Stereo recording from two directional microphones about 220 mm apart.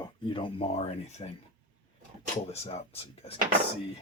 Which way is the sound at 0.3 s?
25° left (ahead or behind).